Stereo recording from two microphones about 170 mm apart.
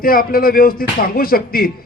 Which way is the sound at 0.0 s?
60° left (ahead or behind).